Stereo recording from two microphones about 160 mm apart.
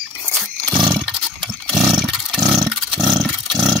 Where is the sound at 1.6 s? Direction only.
Centre (ahead or behind).